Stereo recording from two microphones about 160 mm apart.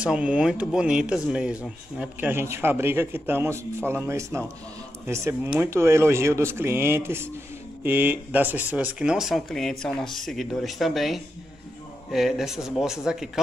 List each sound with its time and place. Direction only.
0.0 s speech: 5° right (ahead or behind)